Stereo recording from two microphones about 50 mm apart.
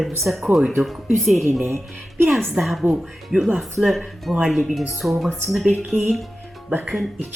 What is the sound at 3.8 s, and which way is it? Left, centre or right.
Speech, centre.